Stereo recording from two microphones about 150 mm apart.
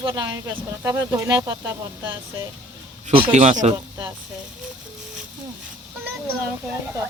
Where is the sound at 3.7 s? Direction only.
15° right (ahead or behind).